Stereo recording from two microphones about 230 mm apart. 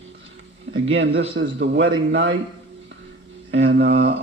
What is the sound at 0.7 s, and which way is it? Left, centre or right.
A man's voice, right.